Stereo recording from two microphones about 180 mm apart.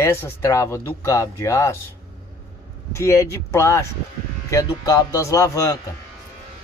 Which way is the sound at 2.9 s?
15° left (ahead or behind).